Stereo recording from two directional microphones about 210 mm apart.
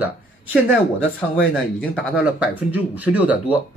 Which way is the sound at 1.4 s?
Centre (ahead or behind).